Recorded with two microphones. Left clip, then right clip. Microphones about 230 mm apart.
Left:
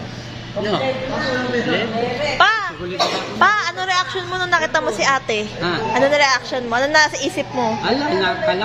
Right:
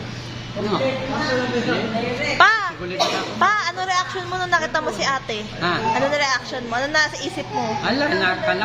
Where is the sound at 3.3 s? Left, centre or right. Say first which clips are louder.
Left 4 dB; centre.